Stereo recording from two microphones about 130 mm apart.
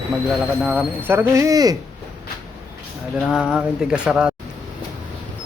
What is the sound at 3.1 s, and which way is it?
A man's voice, 5° right (ahead or behind).